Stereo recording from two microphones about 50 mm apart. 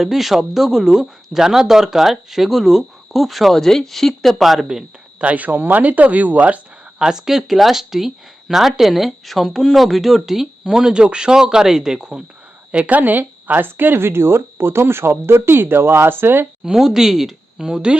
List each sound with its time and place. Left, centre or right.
0.0 s speech: centre
5.2 s speech: right
7.0 s speech: centre
12.7 s speech: right
16.7 s speech: centre